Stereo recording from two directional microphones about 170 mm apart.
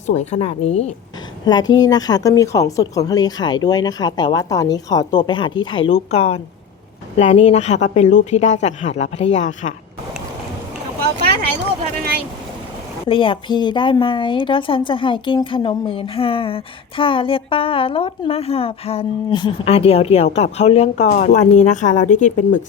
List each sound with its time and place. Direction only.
0.1 s a woman's voice: 40° left (ahead or behind)
1.5 s a woman's voice: 25° left (ahead or behind); by 9.7 s 45° left (ahead or behind)
13.1 s a woman's voice: 30° left (ahead or behind)
21.1 s speech: 50° left (ahead or behind)